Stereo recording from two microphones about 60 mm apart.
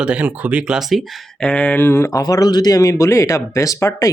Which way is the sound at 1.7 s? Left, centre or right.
Left.